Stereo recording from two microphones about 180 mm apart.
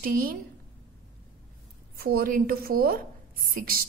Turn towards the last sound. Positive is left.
turn(degrees=-55)  # may be behind; listen again after turning